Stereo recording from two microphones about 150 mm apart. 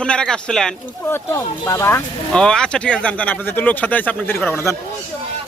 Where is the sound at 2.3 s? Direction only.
5° left (ahead or behind).